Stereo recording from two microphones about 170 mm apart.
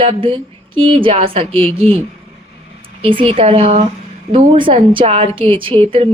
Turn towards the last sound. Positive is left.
turn(degrees=-35)  # may be behind; listen again after turning